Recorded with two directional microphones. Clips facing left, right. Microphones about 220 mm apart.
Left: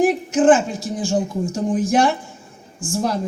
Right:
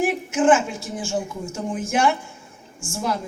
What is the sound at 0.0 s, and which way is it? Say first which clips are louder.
Speech: left 4 dB; 35° left (ahead or behind).